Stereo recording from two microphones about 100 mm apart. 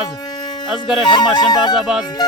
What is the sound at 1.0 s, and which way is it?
Speech, 45° left (ahead or behind).